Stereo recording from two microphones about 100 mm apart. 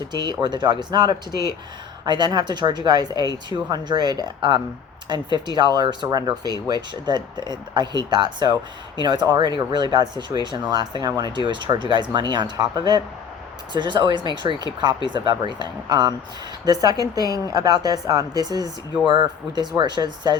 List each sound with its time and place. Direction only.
0.4 s speech: 50° right (ahead or behind)